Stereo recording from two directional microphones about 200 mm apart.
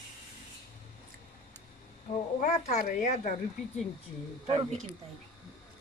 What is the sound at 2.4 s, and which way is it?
Speech, 40° left (ahead or behind).